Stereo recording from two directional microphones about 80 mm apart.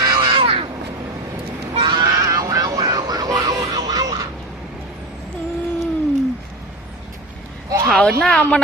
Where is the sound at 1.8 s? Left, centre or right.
Right.